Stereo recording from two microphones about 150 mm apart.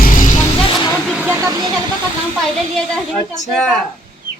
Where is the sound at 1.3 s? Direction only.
20° right (ahead or behind).